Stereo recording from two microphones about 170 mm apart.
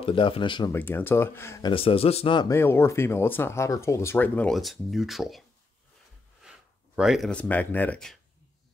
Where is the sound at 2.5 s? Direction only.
15° left (ahead or behind); by 5.4 s centre (ahead or behind).